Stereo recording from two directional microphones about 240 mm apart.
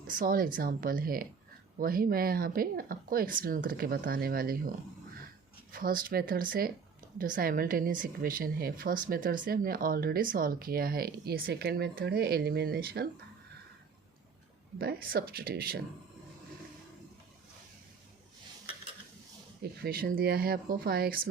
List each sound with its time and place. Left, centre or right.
0.1 s a woman's voice: right
5.7 s a woman's voice: right
14.8 s a woman's voice: right
19.8 s a woman's voice: right